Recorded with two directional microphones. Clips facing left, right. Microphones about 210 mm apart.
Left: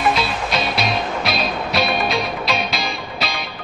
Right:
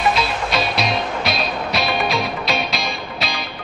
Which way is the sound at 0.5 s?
Centre (ahead or behind).